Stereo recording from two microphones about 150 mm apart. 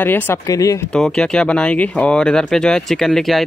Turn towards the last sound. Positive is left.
turn(degrees=0)  # may be behind; listen again after turning